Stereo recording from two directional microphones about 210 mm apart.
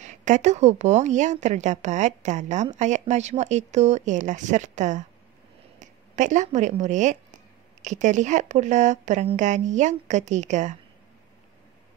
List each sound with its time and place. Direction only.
0.0 s a woman's voice: 35° right (ahead or behind)